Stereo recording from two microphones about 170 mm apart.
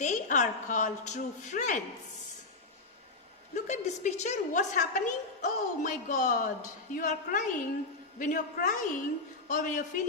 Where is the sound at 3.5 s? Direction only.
45° left (ahead or behind).